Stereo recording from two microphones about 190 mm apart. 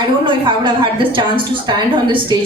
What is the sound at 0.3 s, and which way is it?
A woman's voice, 25° right (ahead or behind).